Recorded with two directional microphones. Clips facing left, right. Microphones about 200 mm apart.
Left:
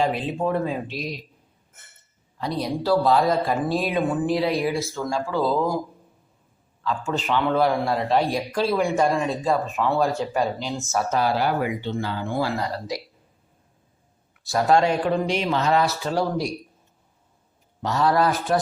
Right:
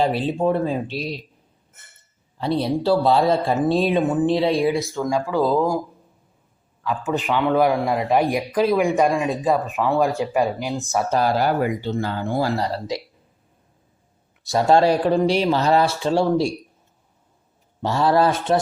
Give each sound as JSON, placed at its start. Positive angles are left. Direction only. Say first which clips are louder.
{"t": 0.0, "sound": "speech", "louder": "right 3 dB", "side_deg": -35}
{"t": 2.4, "sound": "speech", "louder": "right 5 dB", "side_deg": -30}
{"t": 5.1, "sound": "speech", "louder": "right 3 dB", "side_deg": 0}
{"t": 6.8, "sound": "speech", "louder": "right 3 dB", "side_deg": -15}
{"t": 11.1, "sound": "speech", "louder": "right 3 dB", "side_deg": -40}
{"t": 14.4, "sound": "speech", "louder": "right 3 dB", "side_deg": -25}
{"t": 17.8, "sound": "speech", "louder": "right 3 dB", "side_deg": -30}